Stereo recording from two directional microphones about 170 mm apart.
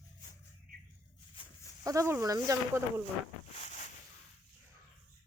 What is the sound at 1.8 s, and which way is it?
Speech, 20° right (ahead or behind).